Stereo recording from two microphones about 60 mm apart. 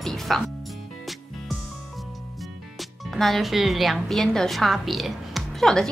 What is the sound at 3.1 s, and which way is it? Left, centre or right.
A woman's voice, centre.